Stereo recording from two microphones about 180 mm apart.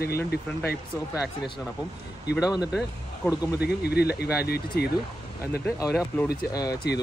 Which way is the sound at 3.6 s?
65° left (ahead or behind).